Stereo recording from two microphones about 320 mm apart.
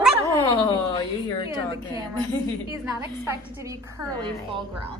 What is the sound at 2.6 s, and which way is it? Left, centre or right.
A woman's voice, centre.